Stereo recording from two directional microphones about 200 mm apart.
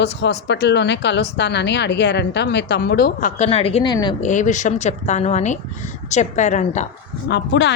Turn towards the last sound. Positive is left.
turn(degrees=60)  # may be behind; listen again after turning